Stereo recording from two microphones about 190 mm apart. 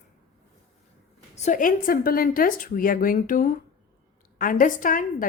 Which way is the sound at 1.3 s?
40° left (ahead or behind).